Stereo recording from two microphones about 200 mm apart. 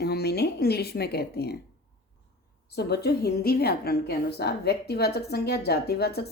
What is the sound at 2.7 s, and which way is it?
A woman's voice, 55° left (ahead or behind).